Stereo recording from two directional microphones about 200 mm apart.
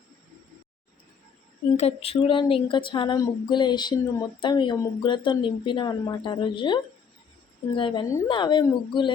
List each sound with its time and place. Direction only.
1.7 s a woman's voice: 30° left (ahead or behind)